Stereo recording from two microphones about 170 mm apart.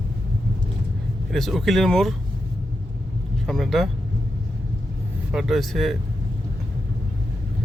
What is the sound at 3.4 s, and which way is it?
Speech, centre (ahead or behind).